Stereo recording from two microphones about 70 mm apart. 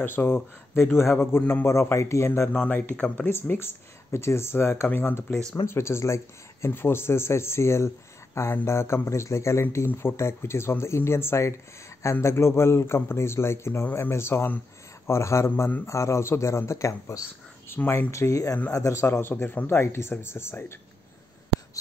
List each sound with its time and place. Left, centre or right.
0.0 s speech: left
2.5 s speech: left
3.3 s speech: left
17.6 s speech: left